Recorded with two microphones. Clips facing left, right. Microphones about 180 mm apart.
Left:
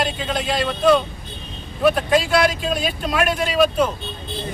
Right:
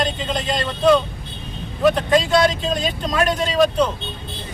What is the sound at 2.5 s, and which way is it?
Speech, 5° left (ahead or behind).